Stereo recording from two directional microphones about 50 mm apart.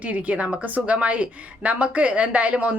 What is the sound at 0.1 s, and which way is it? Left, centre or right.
A woman's voice, right.